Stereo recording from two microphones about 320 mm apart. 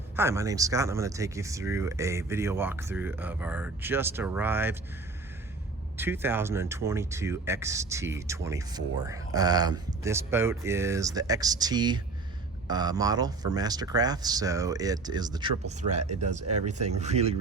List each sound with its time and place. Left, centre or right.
0.2 s speech: centre
6.0 s speech: centre